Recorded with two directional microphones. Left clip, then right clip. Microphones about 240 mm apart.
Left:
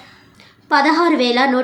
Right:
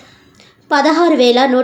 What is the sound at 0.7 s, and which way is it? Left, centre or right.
Speech, centre.